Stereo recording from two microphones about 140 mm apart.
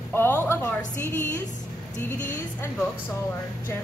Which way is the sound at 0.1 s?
15° left (ahead or behind).